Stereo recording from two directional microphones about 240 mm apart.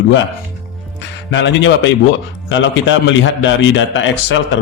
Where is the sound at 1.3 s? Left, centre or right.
Left.